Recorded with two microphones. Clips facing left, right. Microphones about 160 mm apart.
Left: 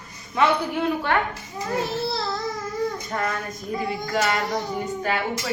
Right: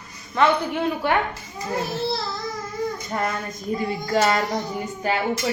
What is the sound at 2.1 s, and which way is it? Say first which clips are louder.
Babbling: left 2 dB; centre (ahead or behind).